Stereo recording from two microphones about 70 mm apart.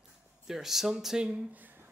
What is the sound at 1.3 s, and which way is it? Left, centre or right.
Speech, right.